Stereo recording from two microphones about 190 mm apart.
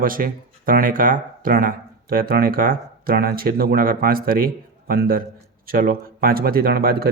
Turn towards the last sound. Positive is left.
turn(degrees=-50)  # may be behind; listen again after turning